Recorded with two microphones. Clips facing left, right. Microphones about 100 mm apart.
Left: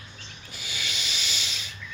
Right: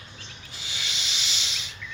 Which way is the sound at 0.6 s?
25° right (ahead or behind).